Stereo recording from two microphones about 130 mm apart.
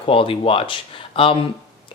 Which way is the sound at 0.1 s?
45° left (ahead or behind).